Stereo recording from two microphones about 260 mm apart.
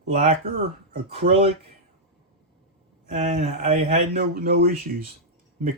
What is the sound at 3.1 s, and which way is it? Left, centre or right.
Speech, right.